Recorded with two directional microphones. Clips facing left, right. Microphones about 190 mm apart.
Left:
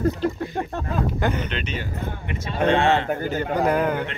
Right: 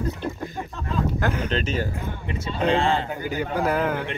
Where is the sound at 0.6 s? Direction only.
55° left (ahead or behind).